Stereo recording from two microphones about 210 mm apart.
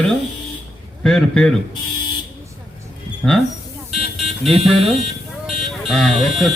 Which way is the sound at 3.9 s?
Centre (ahead or behind).